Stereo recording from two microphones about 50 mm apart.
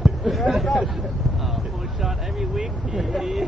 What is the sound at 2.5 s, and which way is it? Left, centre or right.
Speech, centre.